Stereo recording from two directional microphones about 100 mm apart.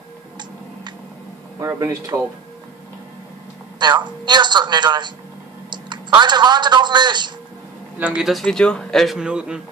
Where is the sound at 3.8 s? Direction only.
45° right (ahead or behind).